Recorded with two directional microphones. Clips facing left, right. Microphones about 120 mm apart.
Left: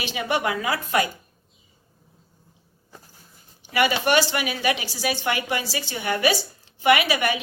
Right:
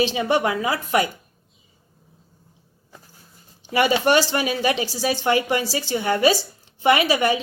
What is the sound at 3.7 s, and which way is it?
A woman's voice, 30° right (ahead or behind).